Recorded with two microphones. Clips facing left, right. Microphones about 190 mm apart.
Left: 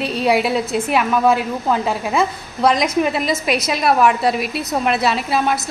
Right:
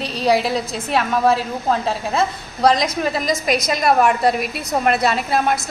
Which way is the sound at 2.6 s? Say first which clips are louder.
Left 1 dB; 35° right (ahead or behind).